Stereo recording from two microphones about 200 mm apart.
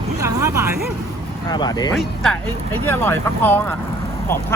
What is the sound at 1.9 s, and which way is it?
Speech, centre (ahead or behind).